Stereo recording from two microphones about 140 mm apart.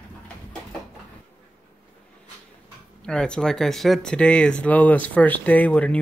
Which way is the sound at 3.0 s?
5° left (ahead or behind).